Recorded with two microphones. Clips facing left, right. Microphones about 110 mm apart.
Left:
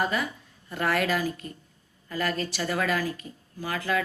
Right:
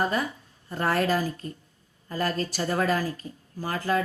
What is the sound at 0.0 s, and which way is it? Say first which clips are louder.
A woman's voice: right 1 dB; 40° right (ahead or behind).